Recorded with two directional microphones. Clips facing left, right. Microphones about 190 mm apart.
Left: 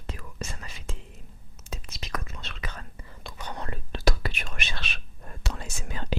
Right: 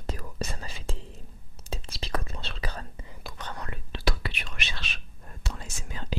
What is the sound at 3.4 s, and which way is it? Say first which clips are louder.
Whispering: left 1 dB; 10° left (ahead or behind).